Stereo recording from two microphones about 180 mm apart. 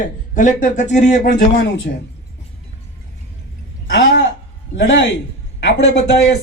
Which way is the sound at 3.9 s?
90° left.